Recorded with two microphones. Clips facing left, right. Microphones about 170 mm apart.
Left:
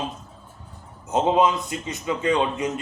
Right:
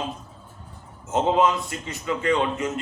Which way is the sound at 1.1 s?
20° left (ahead or behind).